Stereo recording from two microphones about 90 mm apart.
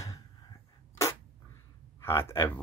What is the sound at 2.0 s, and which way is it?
Speech, 30° left (ahead or behind).